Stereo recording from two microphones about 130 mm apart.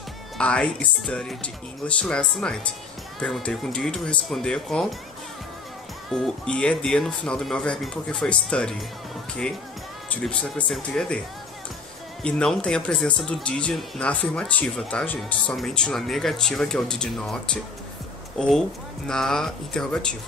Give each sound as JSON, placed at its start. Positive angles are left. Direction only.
{"t": 0.4, "sound": "speech", "side_deg": 10}
{"t": 6.0, "sound": "speech", "side_deg": 5}
{"t": 10.1, "sound": "speech", "side_deg": 5}
{"t": 12.2, "sound": "speech", "side_deg": 5}
{"t": 19.0, "sound": "speech", "side_deg": 5}